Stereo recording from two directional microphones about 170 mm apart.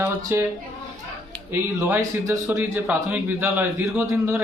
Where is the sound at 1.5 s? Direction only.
15° right (ahead or behind).